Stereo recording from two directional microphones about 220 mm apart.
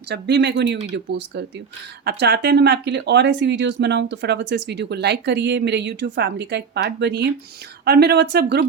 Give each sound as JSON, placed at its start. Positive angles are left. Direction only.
{"t": 0.1, "sound": "speech", "side_deg": -50}